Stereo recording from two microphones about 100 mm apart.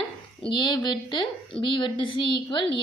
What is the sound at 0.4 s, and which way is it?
A woman's voice, 50° left (ahead or behind).